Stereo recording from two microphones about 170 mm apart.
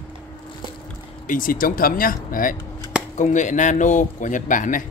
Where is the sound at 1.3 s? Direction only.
55° left (ahead or behind).